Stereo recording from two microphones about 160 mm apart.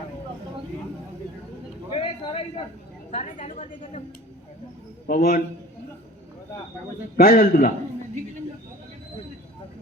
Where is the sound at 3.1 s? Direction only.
50° left (ahead or behind).